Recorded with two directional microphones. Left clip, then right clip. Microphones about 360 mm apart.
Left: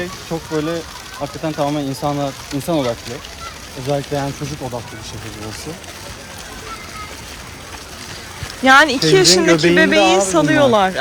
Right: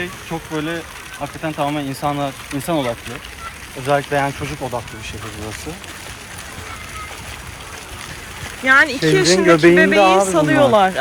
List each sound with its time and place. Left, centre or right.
0.0 s speech: centre
3.8 s speech: right
8.6 s speech: centre